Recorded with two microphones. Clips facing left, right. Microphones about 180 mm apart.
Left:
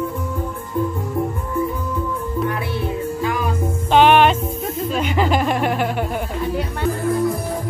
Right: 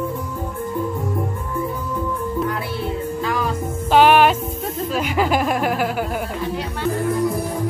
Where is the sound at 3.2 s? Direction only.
20° left (ahead or behind).